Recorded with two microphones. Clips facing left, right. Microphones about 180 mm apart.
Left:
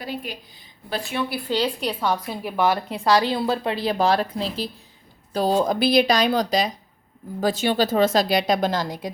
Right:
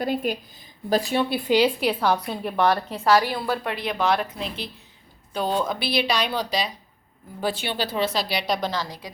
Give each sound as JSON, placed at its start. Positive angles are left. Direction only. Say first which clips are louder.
{"t": 0.0, "sound": "a woman's voice", "louder": "right 7 dB", "side_deg": -50}
{"t": 0.9, "sound": "a woman's voice", "louder": "right 5 dB", "side_deg": -35}
{"t": 1.5, "sound": "a woman's voice", "louder": "right 5 dB", "side_deg": -10}